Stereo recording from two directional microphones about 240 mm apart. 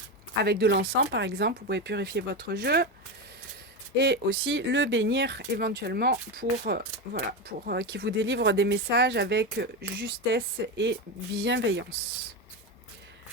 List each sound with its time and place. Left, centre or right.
0.4 s speech: right
3.9 s speech: right